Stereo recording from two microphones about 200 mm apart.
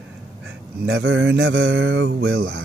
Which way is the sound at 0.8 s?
60° right (ahead or behind).